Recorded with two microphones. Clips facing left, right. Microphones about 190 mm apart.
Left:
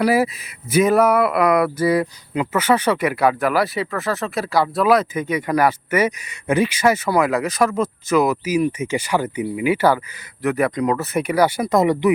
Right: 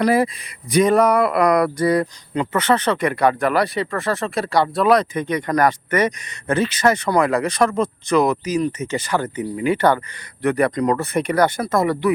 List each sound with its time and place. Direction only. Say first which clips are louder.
0.0 s speech: even; 5° left (ahead or behind)